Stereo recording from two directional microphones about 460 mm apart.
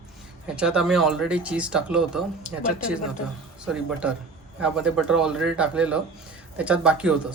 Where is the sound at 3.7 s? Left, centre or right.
Centre.